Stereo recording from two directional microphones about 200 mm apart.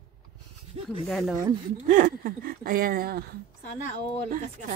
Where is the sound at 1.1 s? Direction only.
Centre (ahead or behind).